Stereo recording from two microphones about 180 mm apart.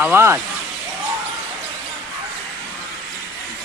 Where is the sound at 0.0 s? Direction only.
10° right (ahead or behind).